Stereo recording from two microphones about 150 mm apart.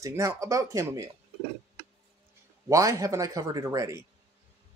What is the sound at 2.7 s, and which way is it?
Speech, 20° right (ahead or behind).